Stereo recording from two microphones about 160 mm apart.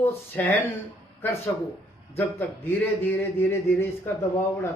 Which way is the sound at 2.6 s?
15° left (ahead or behind).